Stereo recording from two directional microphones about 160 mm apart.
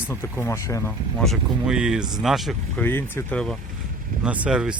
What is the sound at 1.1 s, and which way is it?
Speech, centre (ahead or behind).